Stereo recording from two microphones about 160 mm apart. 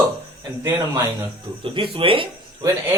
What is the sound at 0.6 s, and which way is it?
Speech, 25° right (ahead or behind).